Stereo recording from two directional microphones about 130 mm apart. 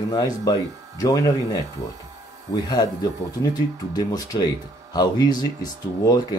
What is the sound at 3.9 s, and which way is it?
Speech, 30° left (ahead or behind).